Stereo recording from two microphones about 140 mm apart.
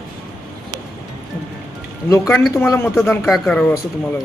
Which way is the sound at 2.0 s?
20° left (ahead or behind).